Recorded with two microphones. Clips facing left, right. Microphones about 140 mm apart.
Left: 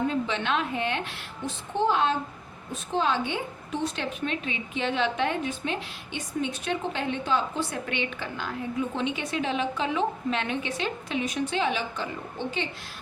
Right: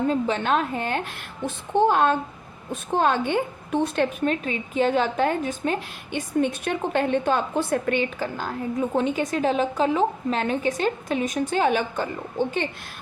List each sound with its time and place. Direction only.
0.1 s a woman's voice: 40° right (ahead or behind)